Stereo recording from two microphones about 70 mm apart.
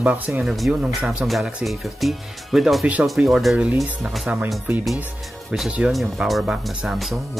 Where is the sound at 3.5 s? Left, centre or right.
Centre.